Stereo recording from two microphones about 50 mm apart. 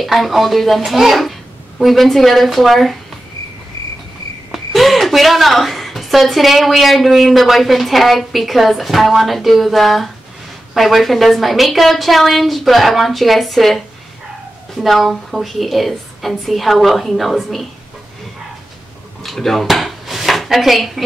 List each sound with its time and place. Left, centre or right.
0.0 s a woman's voice: centre
4.5 s a woman's voice: centre
19.2 s speech: centre